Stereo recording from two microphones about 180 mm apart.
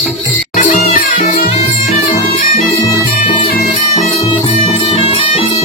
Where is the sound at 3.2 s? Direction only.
40° left (ahead or behind).